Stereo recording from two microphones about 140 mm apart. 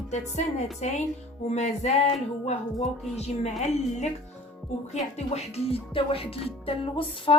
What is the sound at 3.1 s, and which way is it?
Speech, 50° left (ahead or behind).